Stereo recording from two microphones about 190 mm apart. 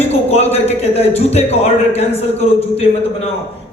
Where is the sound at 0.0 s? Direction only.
35° left (ahead or behind).